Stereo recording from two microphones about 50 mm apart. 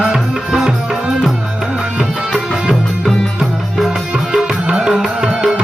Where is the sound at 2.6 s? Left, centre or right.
Centre.